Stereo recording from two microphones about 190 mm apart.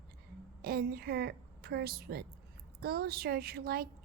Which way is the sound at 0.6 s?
55° right (ahead or behind).